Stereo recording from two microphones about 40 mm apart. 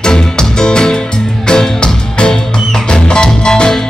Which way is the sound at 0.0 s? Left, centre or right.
Centre.